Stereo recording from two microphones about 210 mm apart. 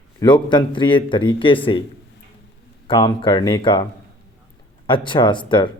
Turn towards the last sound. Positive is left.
turn(degrees=20)  # may be behind; listen again after turning